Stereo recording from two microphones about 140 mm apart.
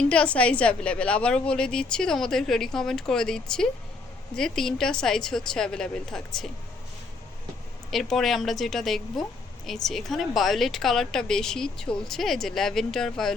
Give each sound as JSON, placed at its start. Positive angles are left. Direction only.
{"t": 0.0, "sound": "a woman's voice", "side_deg": 10}
{"t": 7.9, "sound": "a woman's voice", "side_deg": 0}